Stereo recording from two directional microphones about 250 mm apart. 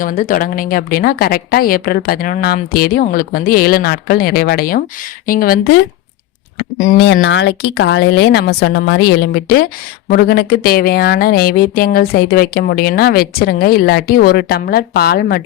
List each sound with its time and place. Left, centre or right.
0.0 s speech: left
6.7 s speech: left
7.1 s speech: left